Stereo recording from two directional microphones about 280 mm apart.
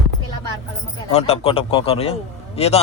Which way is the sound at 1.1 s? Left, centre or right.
Left.